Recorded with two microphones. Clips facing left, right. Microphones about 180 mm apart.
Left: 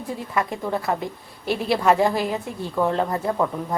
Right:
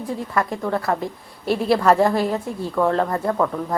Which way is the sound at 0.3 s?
Centre (ahead or behind).